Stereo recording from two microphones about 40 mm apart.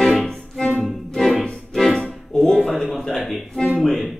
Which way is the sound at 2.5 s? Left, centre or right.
Centre.